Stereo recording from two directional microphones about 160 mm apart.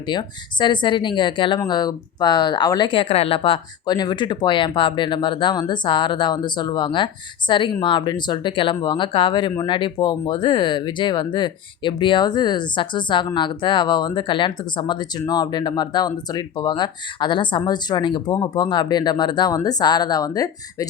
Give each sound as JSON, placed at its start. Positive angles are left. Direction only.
{"t": 0.1, "sound": "speech", "side_deg": 30}